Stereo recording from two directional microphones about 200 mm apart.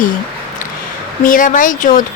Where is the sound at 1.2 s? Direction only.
40° left (ahead or behind).